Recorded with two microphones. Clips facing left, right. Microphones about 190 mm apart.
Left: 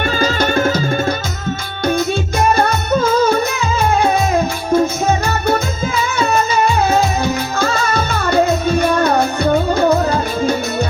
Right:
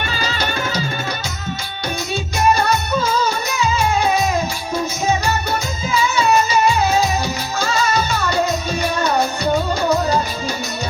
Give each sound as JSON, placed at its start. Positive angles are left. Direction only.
{"t": 0.1, "sound": "music", "side_deg": 50}
{"t": 2.6, "sound": "music", "side_deg": 55}